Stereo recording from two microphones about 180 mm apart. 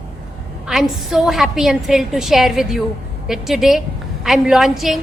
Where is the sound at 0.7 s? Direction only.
Centre (ahead or behind).